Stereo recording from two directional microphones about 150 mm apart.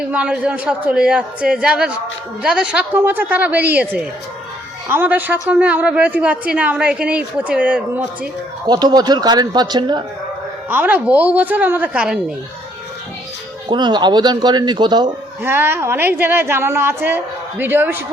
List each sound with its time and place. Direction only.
0.1 s a woman's voice: 10° right (ahead or behind)
8.6 s a man's voice: 30° right (ahead or behind)
10.7 s a woman's voice: 10° right (ahead or behind)
13.7 s a man's voice: 30° right (ahead or behind)
15.4 s a woman's voice: 15° right (ahead or behind)